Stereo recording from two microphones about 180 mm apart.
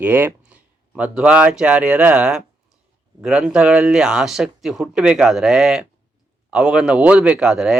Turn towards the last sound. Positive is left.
turn(degrees=0)  # may be behind; listen again after turning